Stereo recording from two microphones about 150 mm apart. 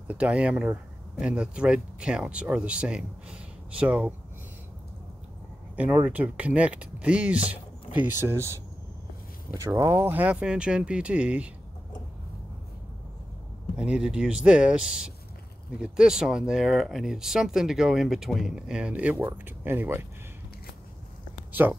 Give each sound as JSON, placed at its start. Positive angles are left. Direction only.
{"t": 0.1, "sound": "speech", "side_deg": -10}
{"t": 5.8, "sound": "speech", "side_deg": -10}
{"t": 13.7, "sound": "speech", "side_deg": -5}
{"t": 21.5, "sound": "a sound", "side_deg": -15}